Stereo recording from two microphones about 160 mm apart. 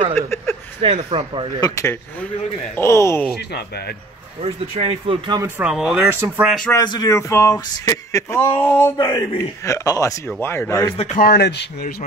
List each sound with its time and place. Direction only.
0.7 s speech: 35° right (ahead or behind)
1.6 s a man's voice: 20° left (ahead or behind)
3.3 s speech: 90° left
4.4 s speech: 35° right (ahead or behind)
5.6 s speech: 5° right (ahead or behind)
6.7 s speech: 25° left (ahead or behind)
8.9 s a man's voice: 25° left (ahead or behind)
11.1 s speech: 85° left